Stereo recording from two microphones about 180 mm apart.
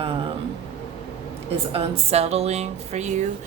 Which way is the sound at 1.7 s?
35° right (ahead or behind).